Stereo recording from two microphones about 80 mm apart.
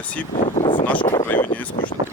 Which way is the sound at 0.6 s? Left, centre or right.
Left.